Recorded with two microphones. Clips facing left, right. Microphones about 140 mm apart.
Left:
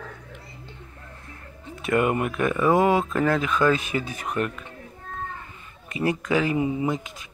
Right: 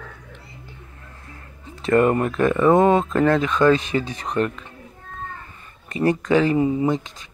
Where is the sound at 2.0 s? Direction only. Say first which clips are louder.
Right 5 dB; 10° left (ahead or behind).